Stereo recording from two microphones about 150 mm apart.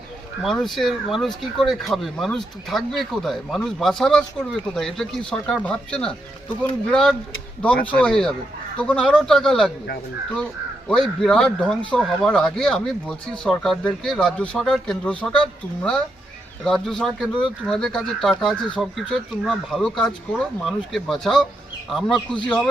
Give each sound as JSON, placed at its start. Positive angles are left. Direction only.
{"t": 0.4, "sound": "speech", "side_deg": 0}
{"t": 10.8, "sound": "speech", "side_deg": 5}
{"t": 16.6, "sound": "speech", "side_deg": 5}